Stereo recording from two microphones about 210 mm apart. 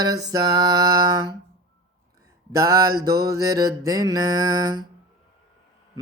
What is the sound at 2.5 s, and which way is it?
Mantra, 15° right (ahead or behind).